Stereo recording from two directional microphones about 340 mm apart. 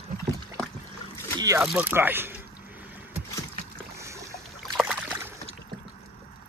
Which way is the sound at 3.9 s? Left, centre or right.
Centre.